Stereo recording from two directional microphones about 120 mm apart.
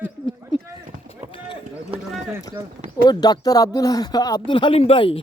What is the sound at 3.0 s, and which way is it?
Speech, 35° left (ahead or behind).